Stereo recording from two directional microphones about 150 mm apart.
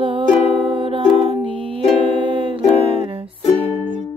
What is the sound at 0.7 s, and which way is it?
Music, 35° right (ahead or behind).